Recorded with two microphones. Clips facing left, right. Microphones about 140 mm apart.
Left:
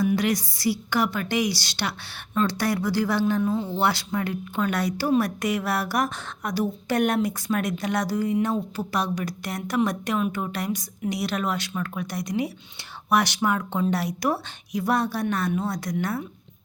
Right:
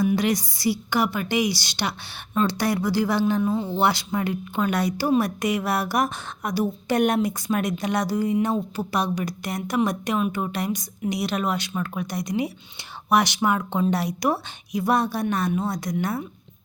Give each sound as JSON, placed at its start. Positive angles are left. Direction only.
{"t": 0.0, "sound": "a woman's voice", "side_deg": -20}